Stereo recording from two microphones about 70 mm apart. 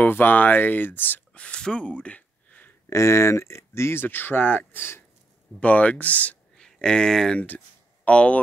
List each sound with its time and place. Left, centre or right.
0.0 s speech: left
2.9 s speech: left
5.6 s speech: centre
6.5 s speech: centre
7.4 s a sound: left